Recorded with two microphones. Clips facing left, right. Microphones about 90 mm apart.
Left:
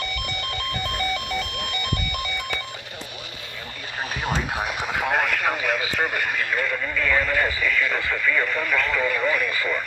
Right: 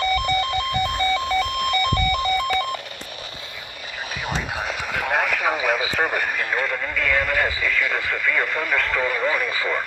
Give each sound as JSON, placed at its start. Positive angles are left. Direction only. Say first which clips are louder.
{"t": 0.0, "sound": "telephone bell ringing", "louder": "right 10 dB", "side_deg": -35}
{"t": 0.5, "sound": "telephone bell ringing", "louder": "right 6 dB", "side_deg": -20}
{"t": 1.5, "sound": "telephone bell ringing", "louder": "right 8 dB", "side_deg": -45}
{"t": 4.8, "sound": "radio", "louder": "right 1 dB", "side_deg": 5}
{"t": 6.4, "sound": "radio", "louder": "right 1 dB", "side_deg": -20}
{"t": 6.9, "sound": "radio", "louder": "even", "side_deg": 5}
{"t": 7.3, "sound": "speech", "louder": "even", "side_deg": -10}
{"t": 9.0, "sound": "speech", "louder": "right 1 dB", "side_deg": -15}